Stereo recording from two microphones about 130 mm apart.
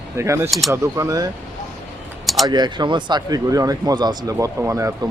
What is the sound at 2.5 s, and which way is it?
Speech, 35° right (ahead or behind).